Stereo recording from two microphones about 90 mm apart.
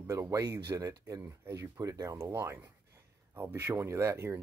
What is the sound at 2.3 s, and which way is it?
Speech, 25° right (ahead or behind).